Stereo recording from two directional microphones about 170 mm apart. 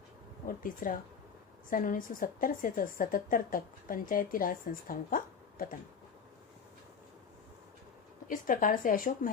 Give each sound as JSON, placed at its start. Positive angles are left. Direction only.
{"t": 0.4, "sound": "a woman's voice", "side_deg": 55}
{"t": 8.3, "sound": "a woman's voice", "side_deg": 50}